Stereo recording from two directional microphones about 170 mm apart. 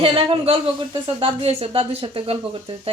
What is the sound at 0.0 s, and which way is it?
Speech, 35° right (ahead or behind).